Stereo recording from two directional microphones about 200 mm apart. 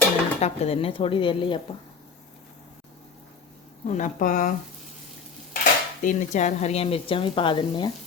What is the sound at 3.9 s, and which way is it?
Speech, 40° left (ahead or behind).